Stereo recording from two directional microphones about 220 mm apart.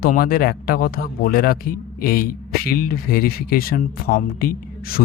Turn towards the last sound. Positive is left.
turn(degrees=40)  # may be behind; listen again after turning